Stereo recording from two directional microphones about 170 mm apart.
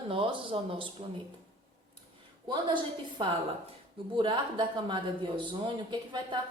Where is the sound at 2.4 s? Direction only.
25° right (ahead or behind).